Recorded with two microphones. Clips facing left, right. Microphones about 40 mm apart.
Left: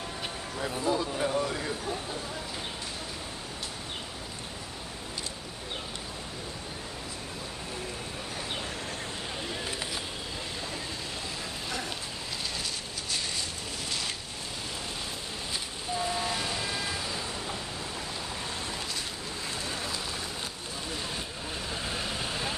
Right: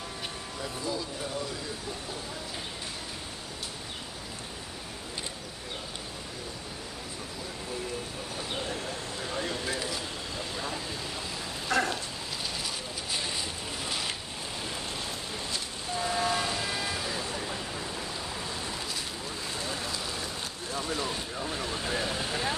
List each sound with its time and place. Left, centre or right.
0.6 s a sound: left
11.7 s dog: right
13.8 s a sound: centre
16.0 s vehicle: centre
19.6 s rain on surface: centre
20.9 s vehicle: centre